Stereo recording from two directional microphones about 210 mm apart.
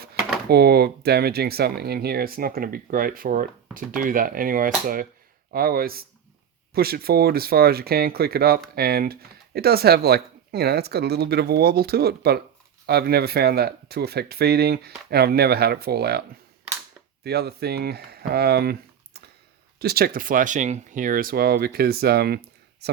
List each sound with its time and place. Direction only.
0.4 s speech: 50° right (ahead or behind)
17.2 s speech: 50° right (ahead or behind)